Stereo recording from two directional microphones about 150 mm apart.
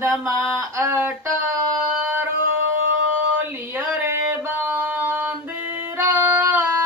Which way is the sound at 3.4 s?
15° right (ahead or behind).